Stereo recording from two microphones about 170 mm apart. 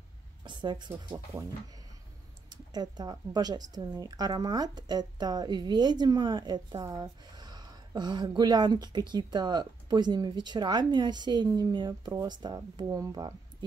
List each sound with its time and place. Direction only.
0.4 s speech: 25° right (ahead or behind)
2.5 s a woman's voice: 25° right (ahead or behind)